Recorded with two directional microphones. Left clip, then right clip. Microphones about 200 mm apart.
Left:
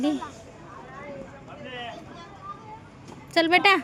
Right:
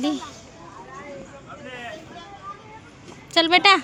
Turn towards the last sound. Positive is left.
turn(degrees=15)  # may be behind; listen again after turning